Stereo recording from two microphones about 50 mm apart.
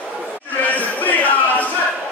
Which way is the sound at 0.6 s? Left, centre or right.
Left.